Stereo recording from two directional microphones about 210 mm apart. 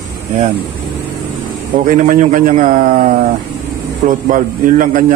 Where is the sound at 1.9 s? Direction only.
40° right (ahead or behind).